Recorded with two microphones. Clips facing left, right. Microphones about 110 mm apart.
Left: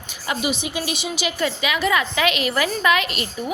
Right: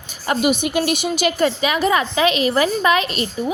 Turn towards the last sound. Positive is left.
turn(degrees=-35)  # may be behind; listen again after turning